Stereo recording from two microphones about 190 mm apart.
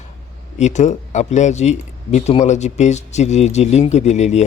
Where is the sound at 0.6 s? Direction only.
35° left (ahead or behind).